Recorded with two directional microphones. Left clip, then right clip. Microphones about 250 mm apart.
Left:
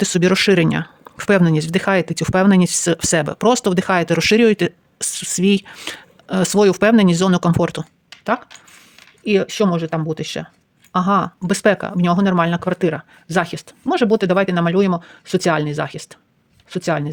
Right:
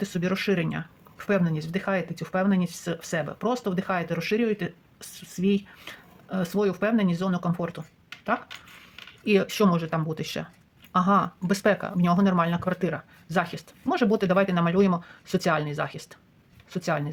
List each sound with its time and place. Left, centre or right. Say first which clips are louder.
0.0 s speech: left 13 dB; left
9.2 s speech: left 6 dB; left